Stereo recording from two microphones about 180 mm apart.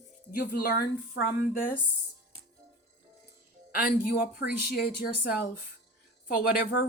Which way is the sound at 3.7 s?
55° left (ahead or behind).